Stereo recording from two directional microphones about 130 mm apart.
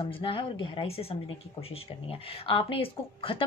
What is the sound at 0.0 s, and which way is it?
Speech, 40° left (ahead or behind).